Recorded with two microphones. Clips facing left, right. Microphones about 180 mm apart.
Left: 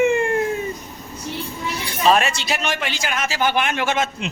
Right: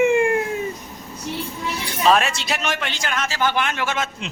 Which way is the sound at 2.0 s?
Centre (ahead or behind).